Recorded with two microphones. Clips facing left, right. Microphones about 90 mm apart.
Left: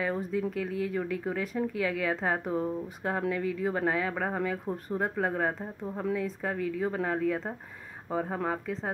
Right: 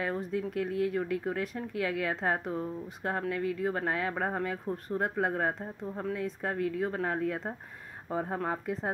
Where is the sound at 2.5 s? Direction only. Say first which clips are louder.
Left 4 dB; 15° left (ahead or behind).